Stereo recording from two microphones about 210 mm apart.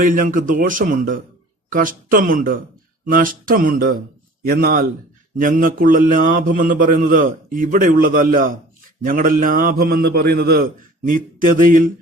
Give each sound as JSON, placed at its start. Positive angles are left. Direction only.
{"t": 0.0, "sound": "a man's voice", "side_deg": -40}